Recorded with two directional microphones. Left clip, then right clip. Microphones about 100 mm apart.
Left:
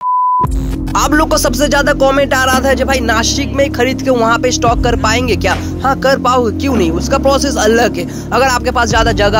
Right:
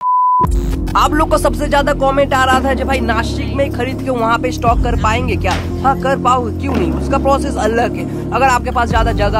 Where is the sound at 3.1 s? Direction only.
45° left (ahead or behind).